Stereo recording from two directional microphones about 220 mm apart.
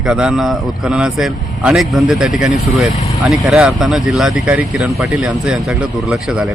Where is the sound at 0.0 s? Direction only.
5° right (ahead or behind).